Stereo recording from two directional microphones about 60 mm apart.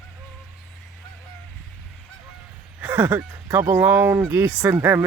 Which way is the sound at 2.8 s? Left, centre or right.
Right.